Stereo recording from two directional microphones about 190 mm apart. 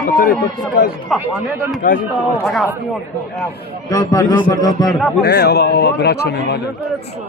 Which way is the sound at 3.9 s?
20° left (ahead or behind).